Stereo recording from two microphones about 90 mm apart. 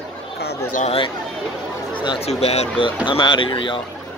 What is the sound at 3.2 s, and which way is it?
Speech, 55° left (ahead or behind).